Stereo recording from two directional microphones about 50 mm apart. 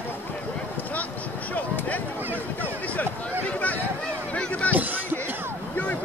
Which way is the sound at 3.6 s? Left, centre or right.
Left.